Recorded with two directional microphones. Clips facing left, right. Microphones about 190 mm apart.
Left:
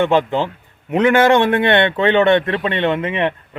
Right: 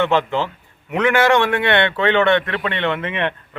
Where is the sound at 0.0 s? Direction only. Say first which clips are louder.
Left 3 dB; 15° left (ahead or behind).